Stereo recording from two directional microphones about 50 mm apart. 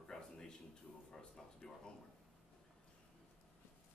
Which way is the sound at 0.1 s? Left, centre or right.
Centre.